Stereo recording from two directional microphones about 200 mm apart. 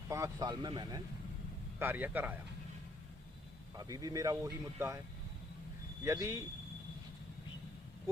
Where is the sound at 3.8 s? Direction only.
15° right (ahead or behind).